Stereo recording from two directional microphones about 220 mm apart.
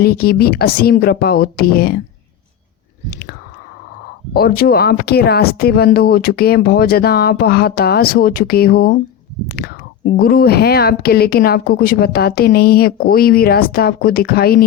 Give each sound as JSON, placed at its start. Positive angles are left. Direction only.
{"t": 0.0, "sound": "speech", "side_deg": 45}
{"t": 3.1, "sound": "speech", "side_deg": 45}
{"t": 4.4, "sound": "speech", "side_deg": 45}